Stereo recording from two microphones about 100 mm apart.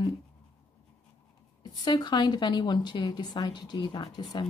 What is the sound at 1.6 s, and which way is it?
Speech, 45° left (ahead or behind).